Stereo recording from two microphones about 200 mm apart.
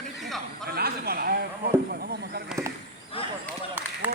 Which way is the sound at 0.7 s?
50° right (ahead or behind).